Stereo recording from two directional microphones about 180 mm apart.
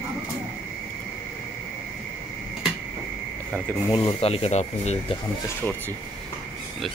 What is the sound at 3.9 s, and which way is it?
Speech, 25° left (ahead or behind).